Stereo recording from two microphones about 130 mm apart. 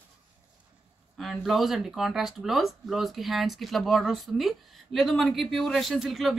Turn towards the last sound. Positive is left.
turn(degrees=0)  # may be behind; listen again after turning